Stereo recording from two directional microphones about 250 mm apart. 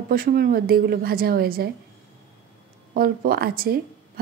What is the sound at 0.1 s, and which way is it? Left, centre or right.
A woman's voice, right.